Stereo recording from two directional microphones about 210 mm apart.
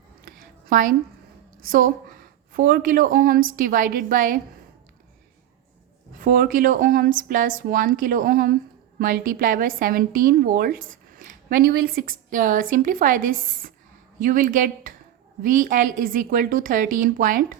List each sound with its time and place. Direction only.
0.3 s a sound: 40° right (ahead or behind)
1.6 s a woman's voice: 40° right (ahead or behind)
6.2 s a woman's voice: 40° right (ahead or behind)